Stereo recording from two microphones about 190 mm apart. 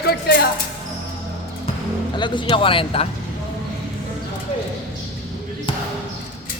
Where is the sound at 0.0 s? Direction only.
55° left (ahead or behind).